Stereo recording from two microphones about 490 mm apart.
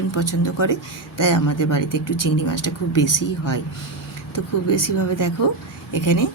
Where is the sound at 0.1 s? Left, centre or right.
Left.